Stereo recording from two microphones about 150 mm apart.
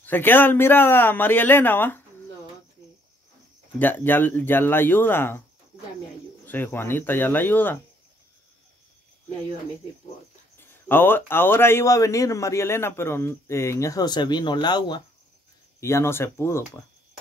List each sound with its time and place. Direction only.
0.0 s speech: 15° left (ahead or behind)
3.8 s speech: 10° left (ahead or behind)
6.4 s speech: 15° left (ahead or behind)
10.9 s a man's voice: 15° left (ahead or behind); by 15.0 s 30° left (ahead or behind)
15.8 s speech: 20° left (ahead or behind)